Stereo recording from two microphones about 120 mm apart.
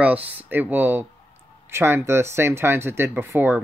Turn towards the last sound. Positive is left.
turn(degrees=-15)  # may be behind; listen again after turning